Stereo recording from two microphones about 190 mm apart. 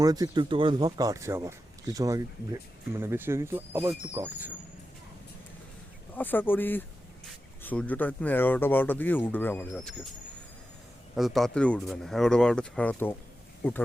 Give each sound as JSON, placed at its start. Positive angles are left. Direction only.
{"t": 0.0, "sound": "speech", "side_deg": -20}
{"t": 6.1, "sound": "speech", "side_deg": 10}
{"t": 11.1, "sound": "speech", "side_deg": 0}